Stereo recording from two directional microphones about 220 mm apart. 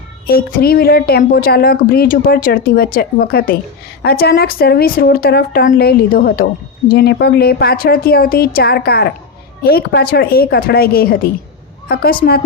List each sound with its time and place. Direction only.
0.3 s a woman's voice: 45° left (ahead or behind)